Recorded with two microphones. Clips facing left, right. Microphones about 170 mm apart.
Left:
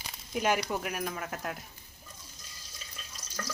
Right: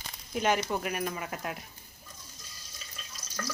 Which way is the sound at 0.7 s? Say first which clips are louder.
Right 2 dB; centre (ahead or behind).